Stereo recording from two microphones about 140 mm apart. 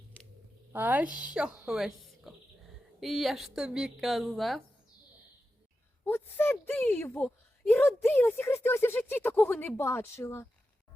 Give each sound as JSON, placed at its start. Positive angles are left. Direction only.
{"t": 0.7, "sound": "speech", "side_deg": -15}
{"t": 6.1, "sound": "speech", "side_deg": 15}